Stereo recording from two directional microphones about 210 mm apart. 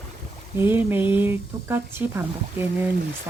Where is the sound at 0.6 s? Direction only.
10° right (ahead or behind).